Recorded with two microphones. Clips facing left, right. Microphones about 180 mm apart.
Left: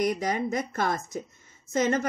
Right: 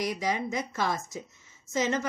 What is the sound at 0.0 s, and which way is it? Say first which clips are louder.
A woman's voice: left 3 dB; 55° left (ahead or behind).